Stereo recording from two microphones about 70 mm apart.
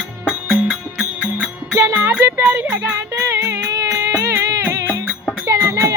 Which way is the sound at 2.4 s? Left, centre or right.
Centre.